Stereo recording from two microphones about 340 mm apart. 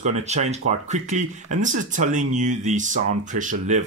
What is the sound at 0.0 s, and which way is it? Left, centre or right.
Speech, centre.